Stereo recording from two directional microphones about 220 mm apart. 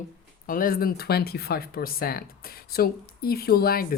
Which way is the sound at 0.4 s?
40° left (ahead or behind).